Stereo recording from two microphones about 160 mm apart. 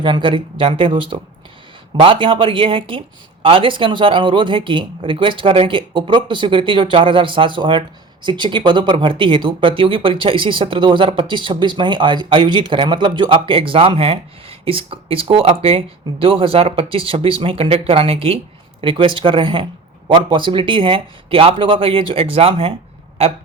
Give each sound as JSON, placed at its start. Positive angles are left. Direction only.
{"t": 0.0, "sound": "speech", "side_deg": -30}